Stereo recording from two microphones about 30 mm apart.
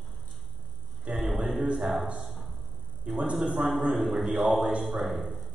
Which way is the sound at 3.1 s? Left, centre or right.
Right.